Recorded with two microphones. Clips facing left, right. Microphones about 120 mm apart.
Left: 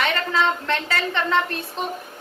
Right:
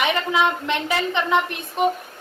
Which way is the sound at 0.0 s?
15° right (ahead or behind).